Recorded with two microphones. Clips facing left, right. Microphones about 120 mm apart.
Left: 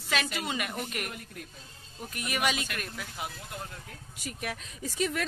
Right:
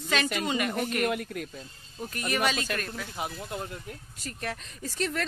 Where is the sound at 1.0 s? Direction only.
85° right.